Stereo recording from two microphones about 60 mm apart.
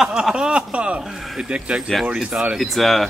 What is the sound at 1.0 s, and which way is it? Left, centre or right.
Speech, centre.